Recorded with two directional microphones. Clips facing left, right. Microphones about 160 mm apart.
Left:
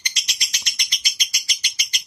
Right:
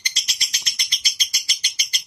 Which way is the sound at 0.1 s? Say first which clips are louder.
Left 1 dB; 35° right (ahead or behind).